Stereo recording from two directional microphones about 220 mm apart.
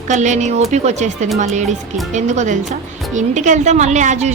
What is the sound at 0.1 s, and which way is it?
A woman's voice, 35° right (ahead or behind).